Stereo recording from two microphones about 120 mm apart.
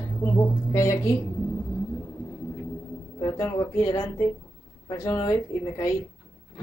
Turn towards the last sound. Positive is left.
turn(degrees=30)  # may be behind; listen again after turning